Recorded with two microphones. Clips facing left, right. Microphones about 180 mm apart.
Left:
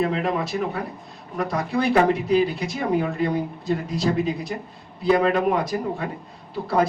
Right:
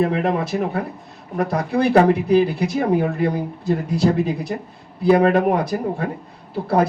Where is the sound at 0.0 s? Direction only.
55° right (ahead or behind).